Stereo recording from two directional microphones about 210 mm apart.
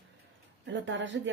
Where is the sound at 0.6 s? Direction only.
60° right (ahead or behind).